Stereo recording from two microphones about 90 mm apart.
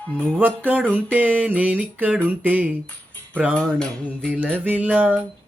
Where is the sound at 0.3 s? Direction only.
20° right (ahead or behind).